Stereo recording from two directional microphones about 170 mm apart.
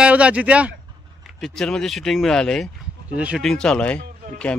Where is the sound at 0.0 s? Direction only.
5° right (ahead or behind).